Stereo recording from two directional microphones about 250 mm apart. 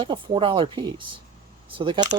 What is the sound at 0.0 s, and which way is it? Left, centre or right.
Speech, centre.